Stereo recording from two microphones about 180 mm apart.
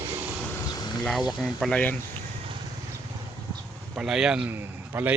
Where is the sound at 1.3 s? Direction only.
Centre (ahead or behind).